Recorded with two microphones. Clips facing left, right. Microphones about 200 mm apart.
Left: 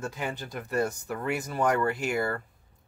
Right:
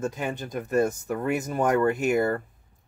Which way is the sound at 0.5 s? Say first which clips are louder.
Right 5 dB; 45° right (ahead or behind).